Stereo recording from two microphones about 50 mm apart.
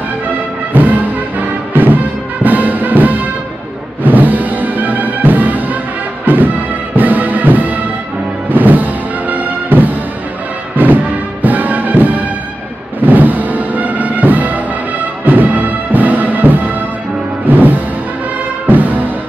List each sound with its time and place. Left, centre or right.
0.7 s music: right
11.4 s music: right